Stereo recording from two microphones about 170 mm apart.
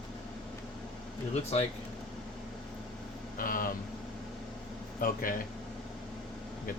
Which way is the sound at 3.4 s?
55° left (ahead or behind).